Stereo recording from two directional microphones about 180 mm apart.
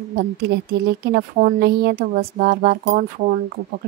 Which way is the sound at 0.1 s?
60° right (ahead or behind).